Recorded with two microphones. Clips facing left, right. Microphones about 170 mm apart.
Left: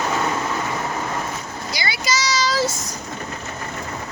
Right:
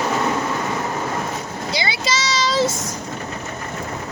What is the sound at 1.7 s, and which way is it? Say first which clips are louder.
Vehicle: right 2 dB; 25° right (ahead or behind).